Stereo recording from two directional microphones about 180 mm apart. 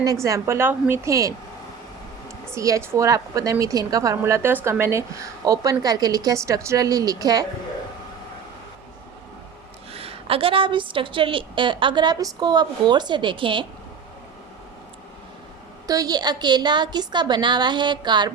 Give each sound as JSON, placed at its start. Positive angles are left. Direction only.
{"t": 0.0, "sound": "a woman's voice", "side_deg": -20}
{"t": 2.6, "sound": "a woman's voice", "side_deg": -15}
{"t": 9.9, "sound": "a woman's voice", "side_deg": -35}
{"t": 15.9, "sound": "a woman's voice", "side_deg": -20}